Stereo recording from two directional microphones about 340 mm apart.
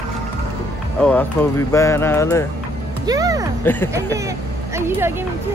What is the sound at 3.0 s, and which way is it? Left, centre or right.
Speech, centre.